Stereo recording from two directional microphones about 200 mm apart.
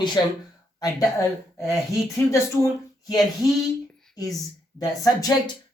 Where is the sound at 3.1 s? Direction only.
20° left (ahead or behind).